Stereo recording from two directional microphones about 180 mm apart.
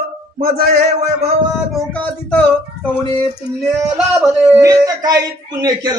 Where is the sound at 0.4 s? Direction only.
55° right (ahead or behind).